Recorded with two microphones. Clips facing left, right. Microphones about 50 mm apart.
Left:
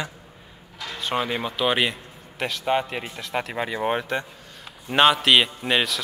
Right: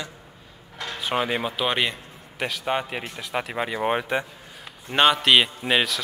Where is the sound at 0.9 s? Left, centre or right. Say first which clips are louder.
Right 1 dB; centre.